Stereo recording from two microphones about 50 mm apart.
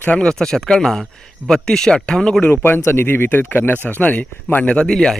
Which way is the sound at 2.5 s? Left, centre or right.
Left.